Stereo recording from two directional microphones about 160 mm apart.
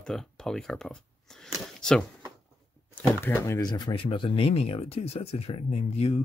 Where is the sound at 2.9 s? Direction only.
15° left (ahead or behind).